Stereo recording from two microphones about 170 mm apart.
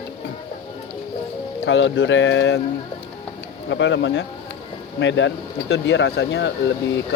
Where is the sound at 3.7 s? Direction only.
90° left.